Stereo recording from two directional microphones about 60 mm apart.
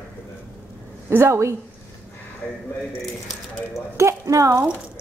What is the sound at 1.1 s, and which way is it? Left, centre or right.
Speech, right.